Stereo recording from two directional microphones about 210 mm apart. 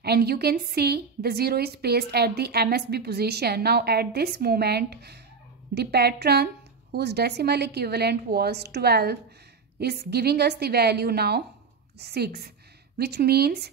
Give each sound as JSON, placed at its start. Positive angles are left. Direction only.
{"t": 0.0, "sound": "a woman's voice", "side_deg": -50}